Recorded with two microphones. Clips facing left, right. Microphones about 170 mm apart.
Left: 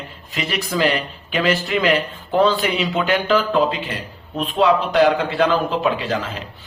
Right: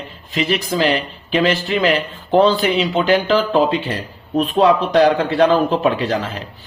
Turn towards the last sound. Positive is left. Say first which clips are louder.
# right 3 dB
turn(degrees=-35)  # may be behind; listen again after turning